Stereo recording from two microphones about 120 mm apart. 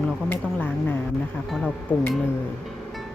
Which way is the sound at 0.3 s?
15° left (ahead or behind).